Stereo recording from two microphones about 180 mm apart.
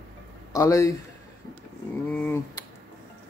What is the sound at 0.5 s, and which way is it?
Speech, 20° left (ahead or behind).